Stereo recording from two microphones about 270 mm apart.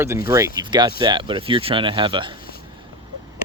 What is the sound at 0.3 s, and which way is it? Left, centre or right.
Speech, centre.